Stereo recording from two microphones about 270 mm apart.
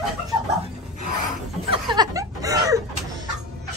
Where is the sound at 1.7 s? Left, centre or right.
Centre.